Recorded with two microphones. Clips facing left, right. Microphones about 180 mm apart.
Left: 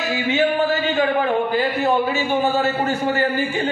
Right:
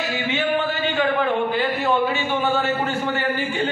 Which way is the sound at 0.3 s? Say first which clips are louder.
Left 5 dB; 40° left (ahead or behind).